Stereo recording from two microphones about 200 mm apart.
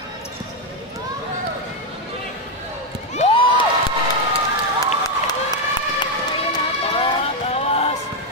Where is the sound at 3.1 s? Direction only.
35° left (ahead or behind).